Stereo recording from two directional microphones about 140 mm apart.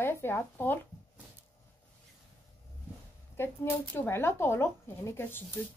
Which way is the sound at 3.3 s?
15° left (ahead or behind).